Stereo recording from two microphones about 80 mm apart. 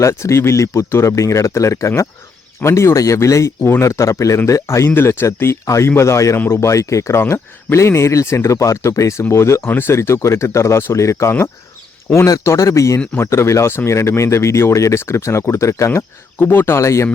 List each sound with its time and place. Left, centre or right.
0.0 s speech: left